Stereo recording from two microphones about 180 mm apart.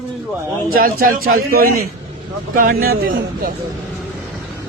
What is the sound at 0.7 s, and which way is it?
A man's voice, 50° right (ahead or behind).